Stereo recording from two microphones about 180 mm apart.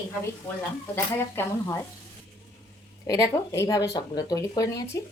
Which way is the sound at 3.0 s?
20° left (ahead or behind).